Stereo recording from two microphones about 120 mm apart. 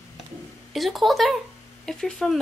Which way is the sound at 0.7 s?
Centre (ahead or behind).